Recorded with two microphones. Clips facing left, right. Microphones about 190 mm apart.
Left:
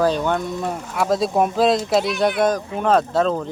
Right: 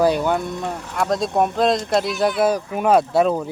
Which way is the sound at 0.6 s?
5° left (ahead or behind).